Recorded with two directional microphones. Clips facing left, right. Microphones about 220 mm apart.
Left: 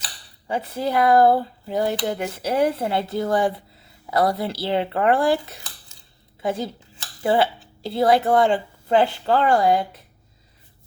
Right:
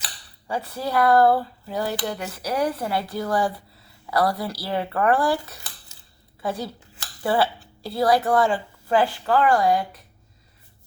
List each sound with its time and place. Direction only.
0.4 s cutlery: 20° left (ahead or behind)
6.4 s speech: 20° left (ahead or behind)
7.2 s cutlery: 20° left (ahead or behind)